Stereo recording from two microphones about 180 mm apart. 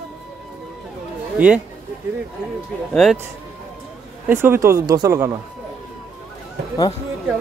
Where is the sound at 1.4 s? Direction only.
10° right (ahead or behind).